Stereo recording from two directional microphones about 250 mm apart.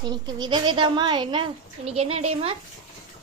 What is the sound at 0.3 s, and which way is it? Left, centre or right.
A woman's voice, centre.